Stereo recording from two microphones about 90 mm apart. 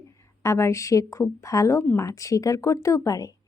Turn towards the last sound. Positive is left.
turn(degrees=40)  # may be behind; listen again after turning